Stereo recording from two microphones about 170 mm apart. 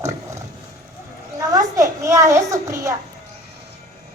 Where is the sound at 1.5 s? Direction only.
20° right (ahead or behind).